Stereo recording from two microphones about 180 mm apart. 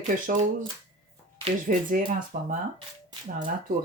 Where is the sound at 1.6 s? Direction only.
45° right (ahead or behind).